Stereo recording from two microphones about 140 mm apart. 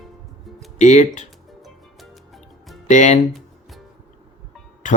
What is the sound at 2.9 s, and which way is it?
Speech, 60° left (ahead or behind).